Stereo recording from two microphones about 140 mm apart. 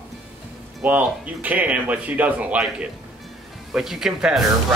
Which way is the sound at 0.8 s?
10° right (ahead or behind).